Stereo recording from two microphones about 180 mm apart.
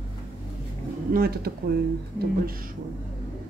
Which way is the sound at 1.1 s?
55° right (ahead or behind).